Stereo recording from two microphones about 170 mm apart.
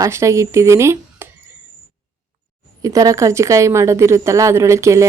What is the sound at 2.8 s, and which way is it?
Speech, 20° right (ahead or behind).